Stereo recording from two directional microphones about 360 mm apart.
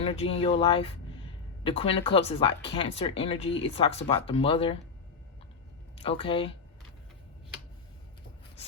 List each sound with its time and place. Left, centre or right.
0.0 s speech: centre
6.0 s speech: centre